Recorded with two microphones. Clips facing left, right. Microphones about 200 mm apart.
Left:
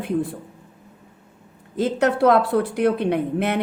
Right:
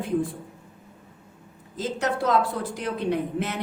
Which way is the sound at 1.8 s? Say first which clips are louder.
Left 8 dB; 60° left (ahead or behind).